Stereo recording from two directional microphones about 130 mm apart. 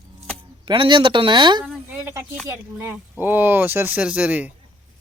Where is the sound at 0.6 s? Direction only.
40° right (ahead or behind).